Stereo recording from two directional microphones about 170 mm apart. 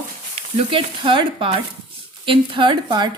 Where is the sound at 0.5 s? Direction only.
30° right (ahead or behind).